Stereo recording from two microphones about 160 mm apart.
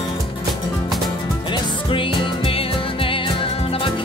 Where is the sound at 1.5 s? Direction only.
35° left (ahead or behind).